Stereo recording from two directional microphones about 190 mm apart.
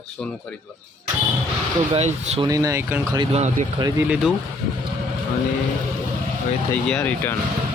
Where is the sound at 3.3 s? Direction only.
35° right (ahead or behind).